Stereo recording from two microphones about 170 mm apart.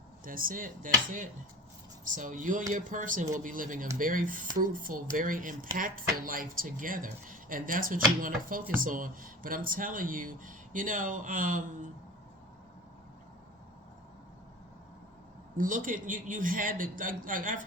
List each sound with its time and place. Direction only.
0.3 s speech: 55° right (ahead or behind)
15.5 s speech: 50° right (ahead or behind)